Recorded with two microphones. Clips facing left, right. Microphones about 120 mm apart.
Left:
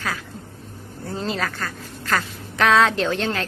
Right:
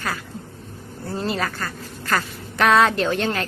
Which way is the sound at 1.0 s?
5° right (ahead or behind).